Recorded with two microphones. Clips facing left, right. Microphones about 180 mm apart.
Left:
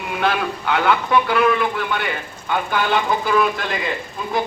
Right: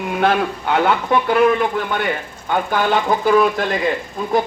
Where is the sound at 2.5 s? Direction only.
45° right (ahead or behind).